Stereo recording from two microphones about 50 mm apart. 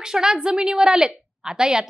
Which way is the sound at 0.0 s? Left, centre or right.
Centre.